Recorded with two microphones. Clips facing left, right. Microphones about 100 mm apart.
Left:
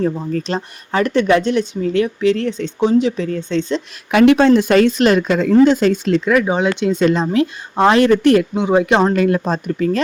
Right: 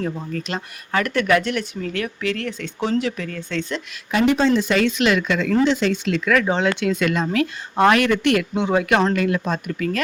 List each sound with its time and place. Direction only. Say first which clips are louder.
0.0 s speech: left 7 dB; 30° left (ahead or behind)
4.1 s speech: left 7 dB; 75° left (ahead or behind); by 6.2 s 40° left (ahead or behind)
6.2 s speech: left 1 dB; 15° left (ahead or behind); by 8.4 s 35° left (ahead or behind)
8.5 s speech: left 4 dB; 20° left (ahead or behind)